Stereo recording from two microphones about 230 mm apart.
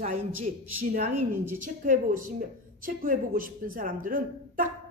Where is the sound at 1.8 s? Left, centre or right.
Right.